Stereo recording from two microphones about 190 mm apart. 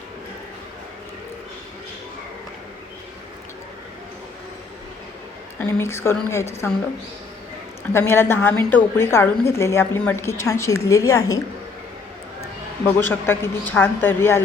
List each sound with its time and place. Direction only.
5.5 s a woman's voice: 10° left (ahead or behind)
7.9 s a woman's voice: 10° left (ahead or behind)
12.8 s a woman's voice: 10° left (ahead or behind)